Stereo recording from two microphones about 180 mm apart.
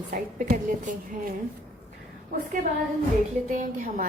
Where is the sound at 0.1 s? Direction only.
50° right (ahead or behind).